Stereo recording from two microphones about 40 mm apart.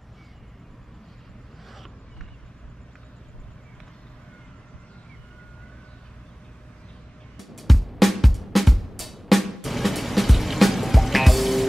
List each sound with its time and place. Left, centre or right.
7.3 s music: centre